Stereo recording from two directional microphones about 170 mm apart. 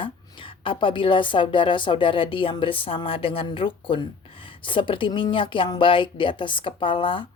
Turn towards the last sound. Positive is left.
turn(degrees=30)  # may be behind; listen again after turning